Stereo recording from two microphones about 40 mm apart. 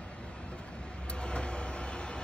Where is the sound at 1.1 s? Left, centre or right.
Left.